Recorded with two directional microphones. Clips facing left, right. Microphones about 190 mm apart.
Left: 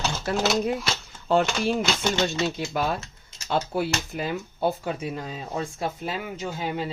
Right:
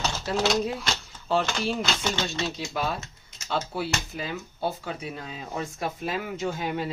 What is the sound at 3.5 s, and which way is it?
Speech, 50° left (ahead or behind).